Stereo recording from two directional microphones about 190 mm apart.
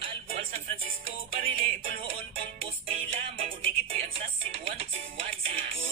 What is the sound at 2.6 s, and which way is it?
Music, 30° right (ahead or behind).